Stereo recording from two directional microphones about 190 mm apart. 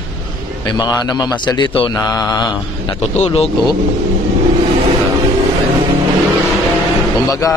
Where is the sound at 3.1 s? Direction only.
35° left (ahead or behind).